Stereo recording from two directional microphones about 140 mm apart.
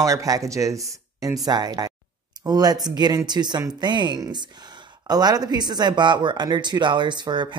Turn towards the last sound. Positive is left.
turn(degrees=-30)  # may be behind; listen again after turning